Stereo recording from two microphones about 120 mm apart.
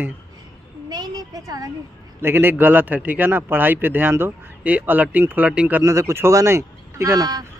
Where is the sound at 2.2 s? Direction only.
15° right (ahead or behind).